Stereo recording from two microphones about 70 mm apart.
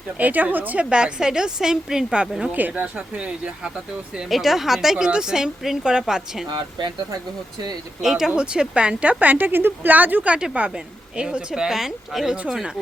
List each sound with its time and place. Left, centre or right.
0.2 s a woman's voice: right; by 2.5 s centre
2.5 s a woman's voice: right
4.3 s a woman's voice: centre
6.5 s speech: right
8.0 s a woman's voice: centre